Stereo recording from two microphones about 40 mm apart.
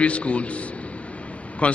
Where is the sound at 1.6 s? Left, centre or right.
Left.